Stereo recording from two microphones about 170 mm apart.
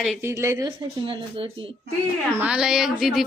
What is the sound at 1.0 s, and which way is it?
Speech, 30° right (ahead or behind).